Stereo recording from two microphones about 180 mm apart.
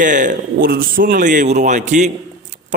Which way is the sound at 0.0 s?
45° right (ahead or behind).